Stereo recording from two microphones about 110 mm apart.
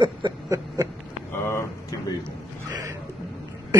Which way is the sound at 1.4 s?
25° left (ahead or behind).